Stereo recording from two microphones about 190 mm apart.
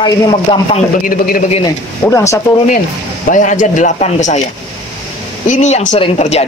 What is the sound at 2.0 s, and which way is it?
Speech, 15° left (ahead or behind).